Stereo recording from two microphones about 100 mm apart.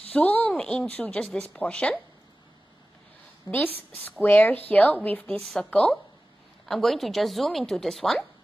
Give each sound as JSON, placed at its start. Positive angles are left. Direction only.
{"t": 0.1, "sound": "a woman's voice", "side_deg": 15}
{"t": 3.6, "sound": "a woman's voice", "side_deg": 20}